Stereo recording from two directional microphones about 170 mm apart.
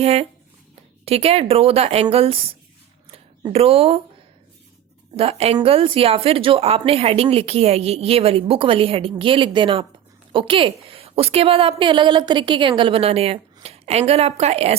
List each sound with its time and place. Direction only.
0.0 s a woman's voice: 35° right (ahead or behind)
3.5 s a woman's voice: 35° right (ahead or behind)
5.1 s a woman's voice: 35° right (ahead or behind)